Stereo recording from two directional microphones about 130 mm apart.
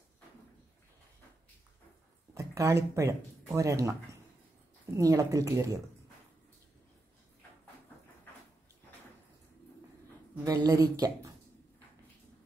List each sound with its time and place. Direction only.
2.3 s speech: 25° right (ahead or behind)
10.4 s speech: 25° right (ahead or behind)